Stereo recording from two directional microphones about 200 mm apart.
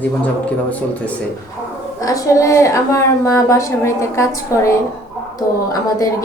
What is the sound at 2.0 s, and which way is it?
A woman's voice, 15° left (ahead or behind).